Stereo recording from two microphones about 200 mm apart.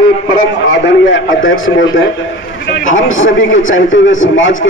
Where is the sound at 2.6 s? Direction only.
55° left (ahead or behind).